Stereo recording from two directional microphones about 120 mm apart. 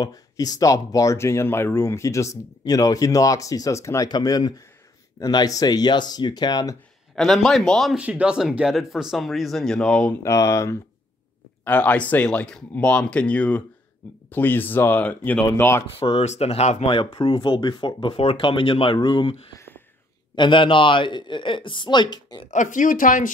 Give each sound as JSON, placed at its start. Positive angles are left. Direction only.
{"t": 0.0, "sound": "speech", "side_deg": 30}
{"t": 7.2, "sound": "speech", "side_deg": 0}
{"t": 8.0, "sound": "speech", "side_deg": -10}
{"t": 10.2, "sound": "speech", "side_deg": 25}
{"t": 11.6, "sound": "speech", "side_deg": 10}
{"t": 16.0, "sound": "speech", "side_deg": 55}
{"t": 16.9, "sound": "speech", "side_deg": 45}
{"t": 20.3, "sound": "speech", "side_deg": 45}
{"t": 22.5, "sound": "speech", "side_deg": 90}